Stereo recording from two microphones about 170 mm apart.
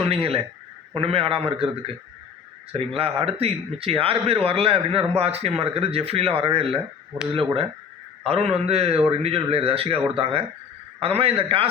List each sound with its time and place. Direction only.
0.0 s speech: 35° right (ahead or behind)
2.7 s speech: 35° right (ahead or behind)